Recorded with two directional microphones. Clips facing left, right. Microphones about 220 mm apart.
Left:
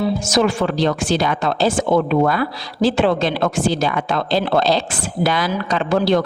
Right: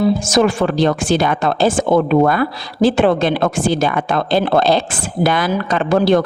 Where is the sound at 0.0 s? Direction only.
50° right (ahead or behind).